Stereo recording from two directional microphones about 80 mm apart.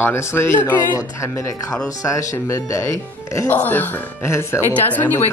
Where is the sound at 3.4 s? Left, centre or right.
Left.